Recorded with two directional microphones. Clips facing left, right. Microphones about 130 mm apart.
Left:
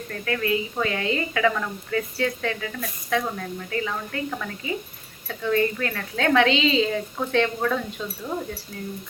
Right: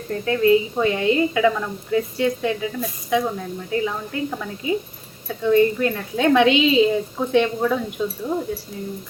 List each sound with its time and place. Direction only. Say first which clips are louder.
0.1 s a woman's voice: right 9 dB; 25° right (ahead or behind)